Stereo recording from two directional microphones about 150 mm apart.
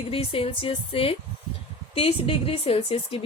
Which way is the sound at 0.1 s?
40° left (ahead or behind).